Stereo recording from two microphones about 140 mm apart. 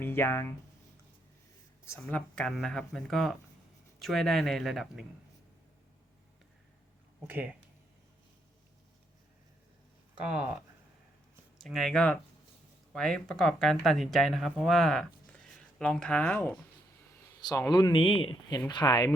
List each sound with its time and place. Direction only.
0.0 s speech: 15° left (ahead or behind)
1.9 s speech: 10° left (ahead or behind)
7.3 s speech: 10° right (ahead or behind)
10.2 s speech: 5° right (ahead or behind)
11.5 s speech: centre (ahead or behind)
17.4 s speech: 25° left (ahead or behind)